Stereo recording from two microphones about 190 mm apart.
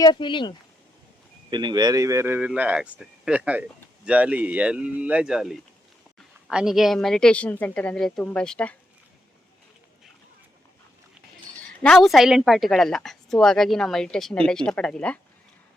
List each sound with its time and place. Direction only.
0.0 s speech: 25° left (ahead or behind)
1.5 s a woman's voice: 25° right (ahead or behind); by 8.7 s 5° left (ahead or behind)
11.8 s a woman's voice: centre (ahead or behind)